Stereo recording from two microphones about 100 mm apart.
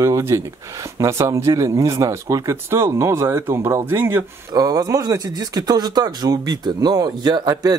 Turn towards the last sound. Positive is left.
turn(degrees=-40)  # may be behind; listen again after turning